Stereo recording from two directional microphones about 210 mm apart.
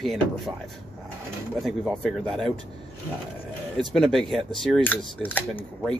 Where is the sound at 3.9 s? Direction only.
Centre (ahead or behind).